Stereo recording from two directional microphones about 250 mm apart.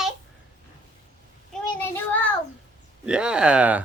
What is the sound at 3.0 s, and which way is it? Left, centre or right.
Speech, centre.